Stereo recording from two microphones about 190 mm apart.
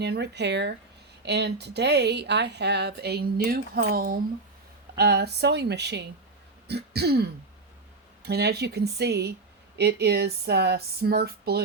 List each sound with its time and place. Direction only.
0.0 s speech: 60° right (ahead or behind)